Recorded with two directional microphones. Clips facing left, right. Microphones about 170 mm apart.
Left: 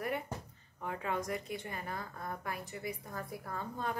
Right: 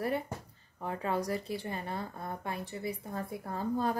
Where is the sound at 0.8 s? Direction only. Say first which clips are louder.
Right 4 dB; 35° right (ahead or behind).